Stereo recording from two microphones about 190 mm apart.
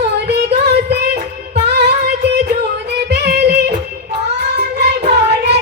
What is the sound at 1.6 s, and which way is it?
Music, 60° right (ahead or behind).